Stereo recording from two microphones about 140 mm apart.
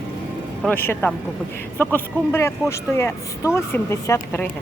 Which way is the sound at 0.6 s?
15° left (ahead or behind).